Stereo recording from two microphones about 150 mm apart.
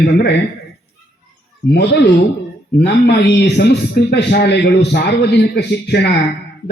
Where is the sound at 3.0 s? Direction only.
90° left.